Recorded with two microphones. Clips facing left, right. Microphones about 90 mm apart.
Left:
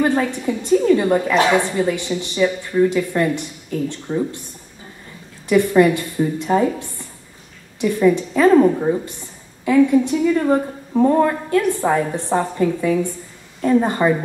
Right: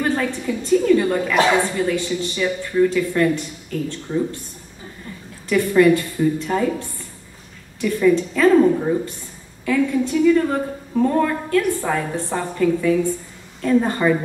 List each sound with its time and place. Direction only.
0.0 s a woman's voice: 20° left (ahead or behind)
5.5 s a woman's voice: 20° left (ahead or behind)
7.8 s a woman's voice: 20° left (ahead or behind)